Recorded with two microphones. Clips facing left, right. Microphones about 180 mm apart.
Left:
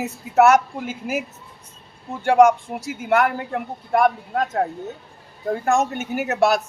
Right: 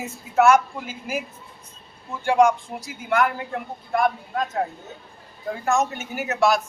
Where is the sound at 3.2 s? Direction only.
55° left (ahead or behind).